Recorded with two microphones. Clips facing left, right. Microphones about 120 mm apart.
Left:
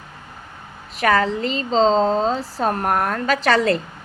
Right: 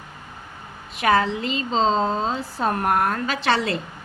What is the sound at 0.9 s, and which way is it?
A woman's voice, 40° left (ahead or behind).